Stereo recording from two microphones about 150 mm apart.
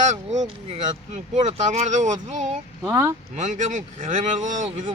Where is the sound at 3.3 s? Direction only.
50° right (ahead or behind).